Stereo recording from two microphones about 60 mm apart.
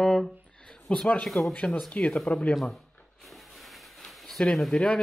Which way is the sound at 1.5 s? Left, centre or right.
Left.